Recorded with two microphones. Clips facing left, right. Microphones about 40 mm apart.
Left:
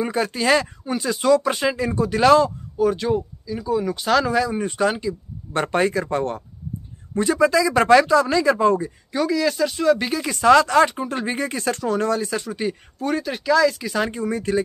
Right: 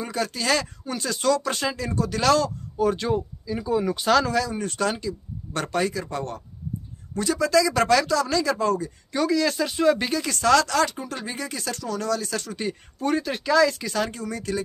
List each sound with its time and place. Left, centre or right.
0.0 s speech: left
2.8 s speech: centre
4.1 s speech: centre
4.4 s speech: centre
9.1 s speech: centre
10.0 s speech: centre; by 12.3 s left
12.3 s speech: centre
13.9 s speech: left